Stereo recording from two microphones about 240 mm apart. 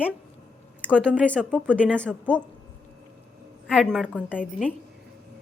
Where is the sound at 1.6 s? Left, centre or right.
Centre.